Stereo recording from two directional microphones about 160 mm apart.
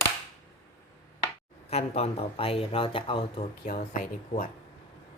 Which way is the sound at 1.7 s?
40° left (ahead or behind).